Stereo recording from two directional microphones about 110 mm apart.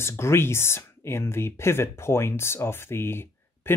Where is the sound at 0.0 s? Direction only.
25° left (ahead or behind).